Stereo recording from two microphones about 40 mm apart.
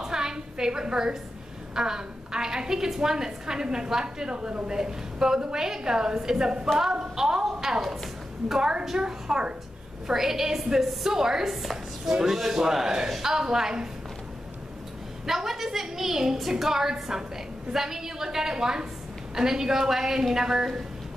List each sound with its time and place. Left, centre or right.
0.0 s a sound: centre
1.8 s a woman's voice: centre
15.2 s a woman's voice: centre